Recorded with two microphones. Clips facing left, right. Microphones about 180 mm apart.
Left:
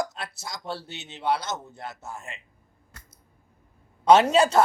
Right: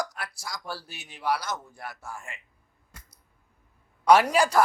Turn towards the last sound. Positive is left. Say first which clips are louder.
# left 2 dB
turn(degrees=25)  # may be behind; listen again after turning